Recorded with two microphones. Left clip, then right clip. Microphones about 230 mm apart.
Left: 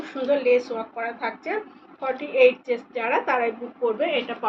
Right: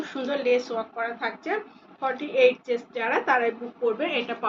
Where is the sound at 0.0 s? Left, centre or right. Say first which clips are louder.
Left 5 dB; centre.